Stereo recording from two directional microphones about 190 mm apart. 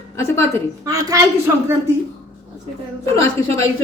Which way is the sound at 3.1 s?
15° left (ahead or behind).